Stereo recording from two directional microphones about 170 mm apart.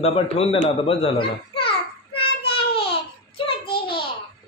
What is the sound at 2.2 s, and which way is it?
Child singing, 35° left (ahead or behind).